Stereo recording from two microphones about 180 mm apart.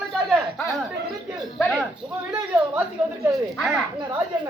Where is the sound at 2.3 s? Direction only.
5° right (ahead or behind).